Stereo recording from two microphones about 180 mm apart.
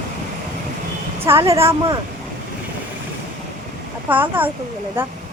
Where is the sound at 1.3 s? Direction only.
15° right (ahead or behind).